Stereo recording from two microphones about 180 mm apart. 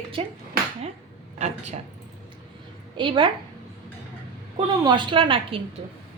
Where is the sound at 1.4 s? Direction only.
40° right (ahead or behind).